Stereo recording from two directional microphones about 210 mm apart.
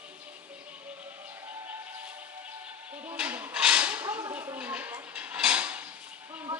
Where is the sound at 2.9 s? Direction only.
5° right (ahead or behind).